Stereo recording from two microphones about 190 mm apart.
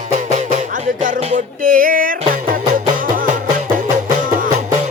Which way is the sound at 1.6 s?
45° right (ahead or behind).